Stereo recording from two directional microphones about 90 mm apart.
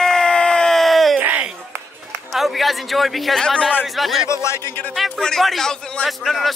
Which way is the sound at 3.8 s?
Centre (ahead or behind).